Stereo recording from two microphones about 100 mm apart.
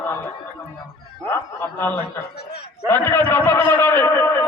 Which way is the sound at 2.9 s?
15° left (ahead or behind).